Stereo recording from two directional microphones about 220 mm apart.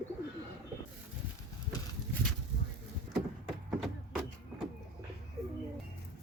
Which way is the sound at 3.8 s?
Centre (ahead or behind).